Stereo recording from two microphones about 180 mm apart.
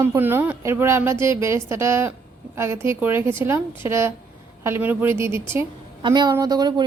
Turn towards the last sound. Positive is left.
turn(degrees=-20)  # may be behind; listen again after turning